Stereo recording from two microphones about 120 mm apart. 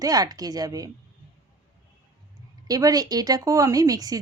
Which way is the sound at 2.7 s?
30° right (ahead or behind).